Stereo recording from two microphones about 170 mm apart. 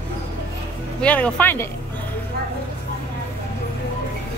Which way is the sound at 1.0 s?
10° left (ahead or behind).